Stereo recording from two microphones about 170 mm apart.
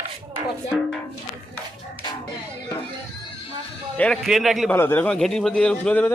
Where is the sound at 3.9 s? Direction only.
5° left (ahead or behind).